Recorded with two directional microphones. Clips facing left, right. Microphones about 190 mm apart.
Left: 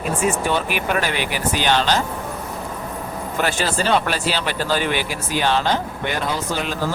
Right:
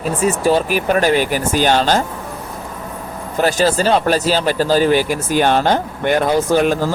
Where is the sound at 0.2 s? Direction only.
35° right (ahead or behind).